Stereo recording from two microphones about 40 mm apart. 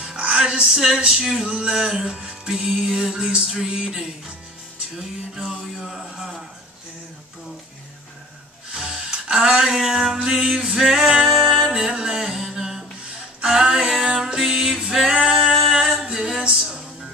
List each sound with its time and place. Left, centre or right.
0.0 s music: right; by 6.0 s centre
8.7 s a sound: right
9.8 s music: centre
11.7 s a sound: centre
14.0 s music: centre
15.0 s singing: centre
16.0 s a capella: centre